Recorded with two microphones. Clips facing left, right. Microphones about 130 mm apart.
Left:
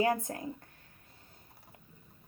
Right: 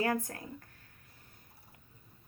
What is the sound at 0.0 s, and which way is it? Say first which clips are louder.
Speech: left 3 dB; 20° left (ahead or behind).